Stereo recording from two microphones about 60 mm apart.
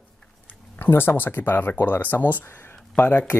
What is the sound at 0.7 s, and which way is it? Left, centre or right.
Speech, left.